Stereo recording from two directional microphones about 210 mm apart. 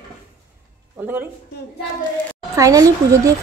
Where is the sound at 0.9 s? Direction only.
10° right (ahead or behind).